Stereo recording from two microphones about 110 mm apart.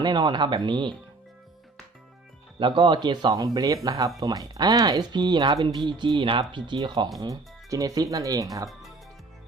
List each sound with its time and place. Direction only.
0.0 s speech: 40° right (ahead or behind)
2.6 s speech: 50° right (ahead or behind)
7.2 s speech: 30° right (ahead or behind)